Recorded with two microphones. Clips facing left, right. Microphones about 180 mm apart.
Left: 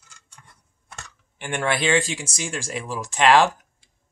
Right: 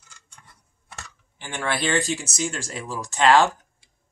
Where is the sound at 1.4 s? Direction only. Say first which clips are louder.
Left 3 dB; 15° left (ahead or behind).